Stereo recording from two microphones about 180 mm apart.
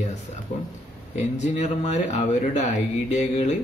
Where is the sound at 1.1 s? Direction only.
40° left (ahead or behind).